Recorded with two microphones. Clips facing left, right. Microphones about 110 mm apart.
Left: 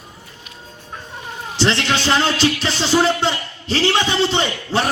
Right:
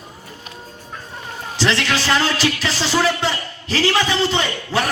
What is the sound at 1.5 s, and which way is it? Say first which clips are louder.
Music: left 1 dB; 25° left (ahead or behind).